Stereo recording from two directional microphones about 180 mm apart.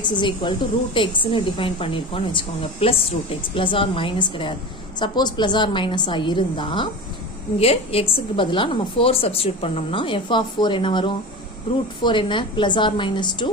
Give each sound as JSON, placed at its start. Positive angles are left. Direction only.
{"t": 0.0, "sound": "a woman's voice", "side_deg": 25}